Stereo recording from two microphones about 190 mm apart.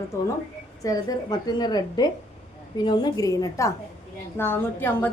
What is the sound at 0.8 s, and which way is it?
A woman's voice, 20° left (ahead or behind).